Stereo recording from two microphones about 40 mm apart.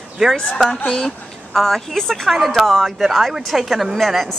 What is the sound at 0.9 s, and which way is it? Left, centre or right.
Speech, centre.